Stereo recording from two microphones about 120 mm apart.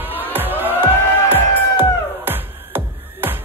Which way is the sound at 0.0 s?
15° right (ahead or behind).